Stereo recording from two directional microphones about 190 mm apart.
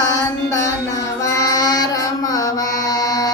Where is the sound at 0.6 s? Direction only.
15° left (ahead or behind).